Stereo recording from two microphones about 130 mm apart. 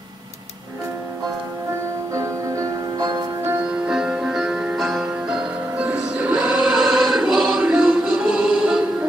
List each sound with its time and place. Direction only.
2.1 s music: 25° right (ahead or behind)
3.8 s music: 5° right (ahead or behind)
5.8 s music: 10° right (ahead or behind)